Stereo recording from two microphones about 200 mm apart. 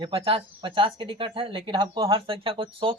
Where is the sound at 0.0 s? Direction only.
25° right (ahead or behind).